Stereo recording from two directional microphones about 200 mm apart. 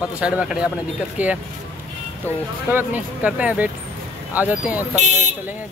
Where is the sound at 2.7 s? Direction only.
10° right (ahead or behind).